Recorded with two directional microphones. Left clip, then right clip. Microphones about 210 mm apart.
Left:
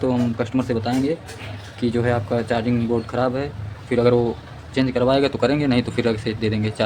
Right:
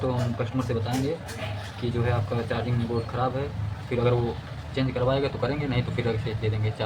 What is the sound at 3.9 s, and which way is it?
Speech, 55° left (ahead or behind).